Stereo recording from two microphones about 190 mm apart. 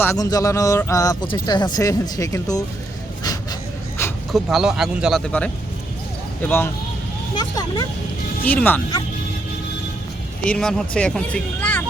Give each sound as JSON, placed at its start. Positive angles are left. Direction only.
{"t": 0.0, "sound": "speech", "side_deg": 15}
{"t": 3.2, "sound": "pant", "side_deg": 15}
{"t": 4.3, "sound": "speech", "side_deg": 0}
{"t": 7.3, "sound": "speech", "side_deg": 20}
{"t": 8.4, "sound": "speech", "side_deg": 10}
{"t": 10.4, "sound": "speech", "side_deg": 5}